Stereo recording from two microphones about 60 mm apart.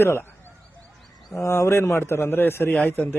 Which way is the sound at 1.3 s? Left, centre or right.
Left.